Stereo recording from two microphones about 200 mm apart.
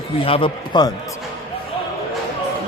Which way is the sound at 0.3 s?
25° left (ahead or behind).